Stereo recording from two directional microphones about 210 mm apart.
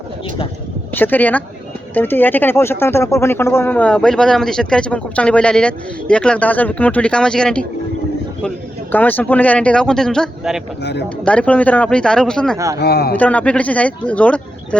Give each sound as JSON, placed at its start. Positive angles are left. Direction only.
{"t": 0.9, "sound": "speech", "side_deg": 10}
{"t": 12.5, "sound": "speech", "side_deg": -15}
{"t": 12.8, "sound": "speech", "side_deg": 50}
{"t": 13.1, "sound": "speech", "side_deg": 5}